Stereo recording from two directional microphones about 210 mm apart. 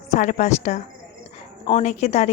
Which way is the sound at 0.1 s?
35° left (ahead or behind).